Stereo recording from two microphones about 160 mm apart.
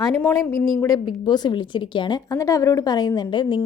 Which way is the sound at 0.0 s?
15° left (ahead or behind).